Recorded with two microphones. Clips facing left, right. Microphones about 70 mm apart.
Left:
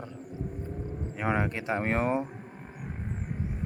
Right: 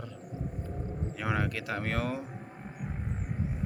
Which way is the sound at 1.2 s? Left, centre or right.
Left.